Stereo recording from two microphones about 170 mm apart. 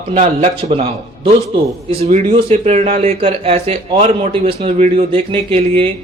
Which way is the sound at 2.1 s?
40° right (ahead or behind).